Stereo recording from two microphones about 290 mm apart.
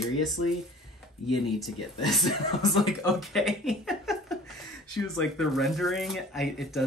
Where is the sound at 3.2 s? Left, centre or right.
Centre.